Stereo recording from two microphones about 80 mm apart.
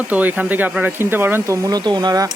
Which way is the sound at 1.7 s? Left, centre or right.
Right.